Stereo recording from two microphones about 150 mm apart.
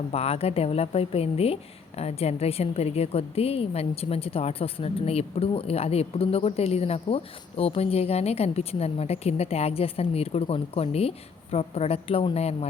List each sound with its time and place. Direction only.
0.1 s a woman's voice: 40° left (ahead or behind)